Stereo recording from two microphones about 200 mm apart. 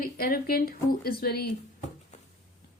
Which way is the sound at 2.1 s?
35° left (ahead or behind).